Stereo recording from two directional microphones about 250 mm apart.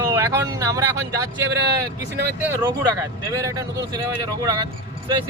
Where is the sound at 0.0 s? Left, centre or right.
Centre.